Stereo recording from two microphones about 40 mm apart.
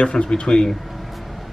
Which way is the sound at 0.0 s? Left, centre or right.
Left.